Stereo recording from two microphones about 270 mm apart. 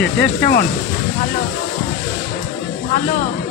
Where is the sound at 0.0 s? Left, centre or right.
Left.